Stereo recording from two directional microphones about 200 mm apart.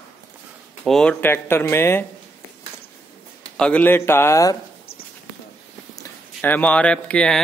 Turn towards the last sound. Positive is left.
turn(degrees=5)  # may be behind; listen again after turning